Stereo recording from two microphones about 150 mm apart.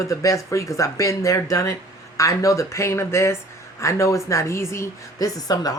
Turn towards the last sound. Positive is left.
turn(degrees=25)  # may be behind; listen again after turning